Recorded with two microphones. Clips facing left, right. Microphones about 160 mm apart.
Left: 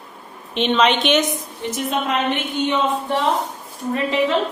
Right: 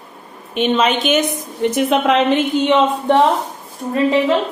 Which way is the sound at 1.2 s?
60° right (ahead or behind).